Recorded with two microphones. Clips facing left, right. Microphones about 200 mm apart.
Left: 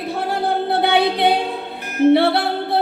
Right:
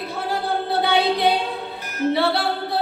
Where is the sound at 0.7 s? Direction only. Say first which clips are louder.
Left 1 dB; 60° left (ahead or behind).